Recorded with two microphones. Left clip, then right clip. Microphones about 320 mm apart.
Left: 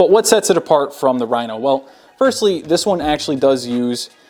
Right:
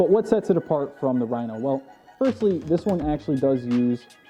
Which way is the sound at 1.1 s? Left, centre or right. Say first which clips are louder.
Left 8 dB; left.